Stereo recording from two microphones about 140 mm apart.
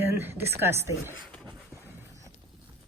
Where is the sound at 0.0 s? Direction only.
15° right (ahead or behind).